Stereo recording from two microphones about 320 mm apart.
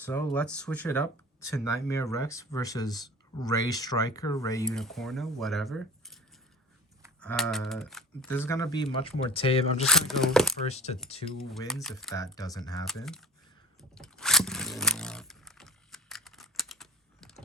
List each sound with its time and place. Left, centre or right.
0.0 s speech: centre
7.2 s speech: centre
9.8 s speech: centre
10.7 s speech: centre
11.6 s speech: centre
12.9 s speech: centre
13.9 s vehicle: centre